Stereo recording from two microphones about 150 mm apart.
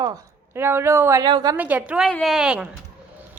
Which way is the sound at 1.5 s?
10° right (ahead or behind).